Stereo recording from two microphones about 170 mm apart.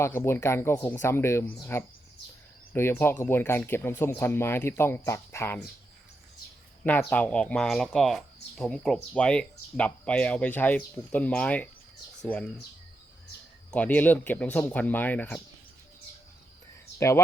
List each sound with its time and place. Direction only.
0.0 s speech: 15° left (ahead or behind)
7.1 s speech: 5° left (ahead or behind)
13.7 s speech: 10° left (ahead or behind)